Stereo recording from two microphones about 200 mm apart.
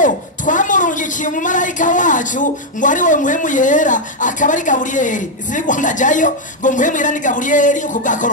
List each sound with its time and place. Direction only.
0.0 s a woman's voice: 40° left (ahead or behind)